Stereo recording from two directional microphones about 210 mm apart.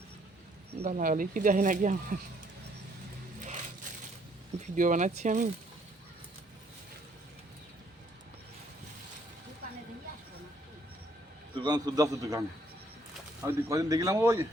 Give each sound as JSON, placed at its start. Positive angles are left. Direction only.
{"t": 0.8, "sound": "speech", "side_deg": -40}
{"t": 4.6, "sound": "speech", "side_deg": -35}
{"t": 11.5, "sound": "speech", "side_deg": -20}